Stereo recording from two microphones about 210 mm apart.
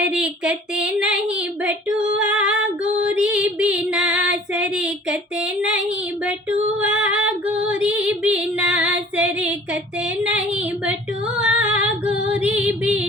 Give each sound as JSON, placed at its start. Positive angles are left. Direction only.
{"t": 0.0, "sound": "a sound", "side_deg": -5}
{"t": 2.1, "sound": "female singing", "side_deg": -5}
{"t": 6.7, "sound": "female singing", "side_deg": -5}